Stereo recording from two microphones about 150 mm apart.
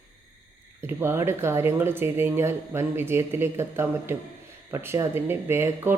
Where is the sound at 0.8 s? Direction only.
15° right (ahead or behind).